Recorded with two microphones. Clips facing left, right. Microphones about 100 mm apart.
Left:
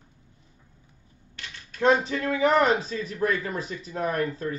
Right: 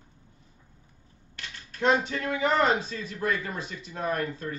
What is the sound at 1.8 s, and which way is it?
Speech, 30° left (ahead or behind).